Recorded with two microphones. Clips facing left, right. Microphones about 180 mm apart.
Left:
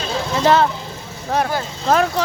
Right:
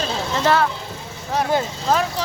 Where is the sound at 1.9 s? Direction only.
55° left (ahead or behind).